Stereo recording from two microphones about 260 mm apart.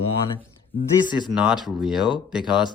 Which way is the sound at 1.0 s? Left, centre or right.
Centre.